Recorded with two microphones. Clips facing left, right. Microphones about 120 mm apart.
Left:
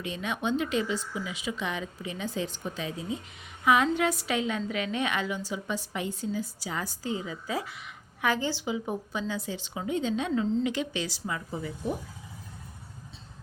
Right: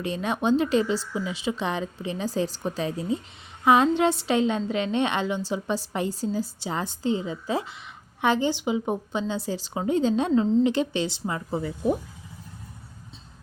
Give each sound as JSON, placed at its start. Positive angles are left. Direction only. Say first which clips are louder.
{"t": 0.0, "sound": "a woman's voice", "louder": "right 6 dB", "side_deg": -35}
{"t": 9.5, "sound": "a woman's voice", "louder": "right 6 dB", "side_deg": -35}